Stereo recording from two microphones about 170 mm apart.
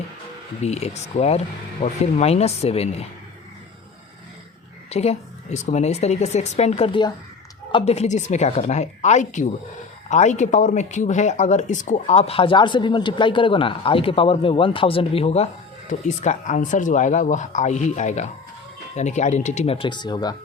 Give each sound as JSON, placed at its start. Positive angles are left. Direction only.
{"t": 0.6, "sound": "speech", "side_deg": 40}
{"t": 4.9, "sound": "speech", "side_deg": 40}